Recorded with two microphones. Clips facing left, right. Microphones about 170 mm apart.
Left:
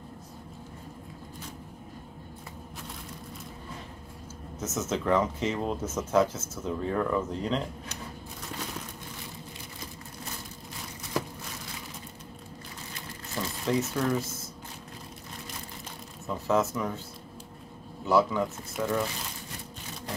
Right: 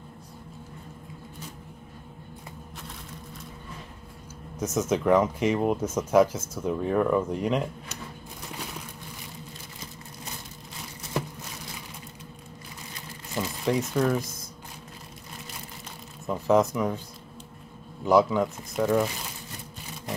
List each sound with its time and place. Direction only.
4.6 s speech: 10° right (ahead or behind)
13.4 s speech: 15° right (ahead or behind)
16.3 s speech: 15° right (ahead or behind)
18.0 s speech: 15° right (ahead or behind)